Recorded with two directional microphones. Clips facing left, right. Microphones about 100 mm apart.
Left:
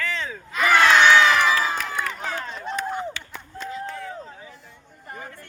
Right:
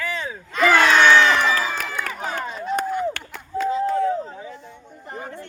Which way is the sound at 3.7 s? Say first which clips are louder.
Right 12 dB; 30° right (ahead or behind).